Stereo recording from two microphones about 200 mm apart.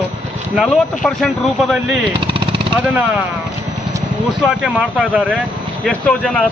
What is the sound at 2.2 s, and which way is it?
Jackhammer, 25° right (ahead or behind).